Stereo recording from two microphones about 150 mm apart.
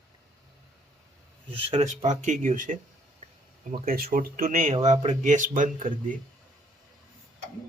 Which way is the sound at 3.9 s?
75° right (ahead or behind).